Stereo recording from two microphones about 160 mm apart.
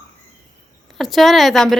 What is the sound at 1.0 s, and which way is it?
Speech, centre (ahead or behind).